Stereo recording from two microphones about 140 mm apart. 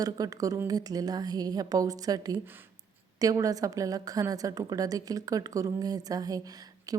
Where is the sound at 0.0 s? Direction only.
25° right (ahead or behind).